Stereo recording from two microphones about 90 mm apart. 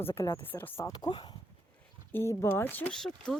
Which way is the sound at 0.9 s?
60° left (ahead or behind).